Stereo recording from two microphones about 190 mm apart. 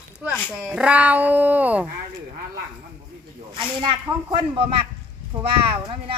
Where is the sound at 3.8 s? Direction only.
25° right (ahead or behind).